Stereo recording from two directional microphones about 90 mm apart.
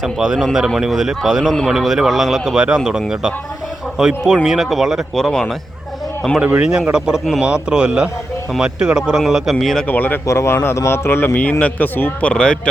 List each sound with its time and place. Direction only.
0.0 s a man's voice: 5° right (ahead or behind)
6.4 s a man's voice: 15° right (ahead or behind)
9.8 s speech: 20° left (ahead or behind)
10.2 s speech: 30° left (ahead or behind); by 12.5 s 10° left (ahead or behind)